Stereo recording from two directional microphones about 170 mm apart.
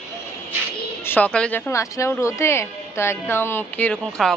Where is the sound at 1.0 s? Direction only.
10° left (ahead or behind).